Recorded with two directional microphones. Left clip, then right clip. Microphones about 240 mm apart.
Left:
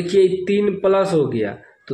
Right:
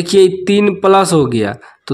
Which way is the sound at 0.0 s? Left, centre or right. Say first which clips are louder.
Right 6 dB; right.